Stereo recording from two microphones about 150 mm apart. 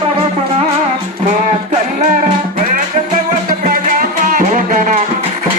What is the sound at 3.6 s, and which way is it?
Music, 65° right (ahead or behind).